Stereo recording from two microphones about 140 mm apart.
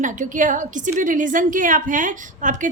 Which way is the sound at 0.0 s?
65° right (ahead or behind).